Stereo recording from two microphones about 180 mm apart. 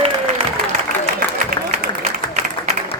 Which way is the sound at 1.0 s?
50° right (ahead or behind).